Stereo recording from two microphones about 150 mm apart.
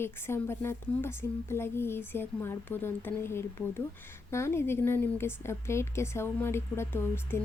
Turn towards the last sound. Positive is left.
turn(degrees=15)  # may be behind; listen again after turning